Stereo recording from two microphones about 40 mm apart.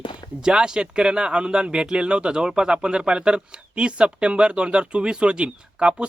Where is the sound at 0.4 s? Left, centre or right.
Centre.